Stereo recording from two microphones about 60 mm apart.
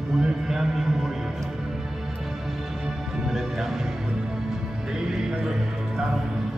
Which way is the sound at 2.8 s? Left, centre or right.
Centre.